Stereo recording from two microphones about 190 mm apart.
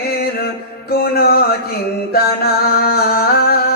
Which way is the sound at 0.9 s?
55° left (ahead or behind).